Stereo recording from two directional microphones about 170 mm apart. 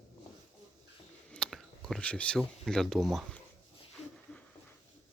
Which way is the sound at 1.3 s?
5° left (ahead or behind).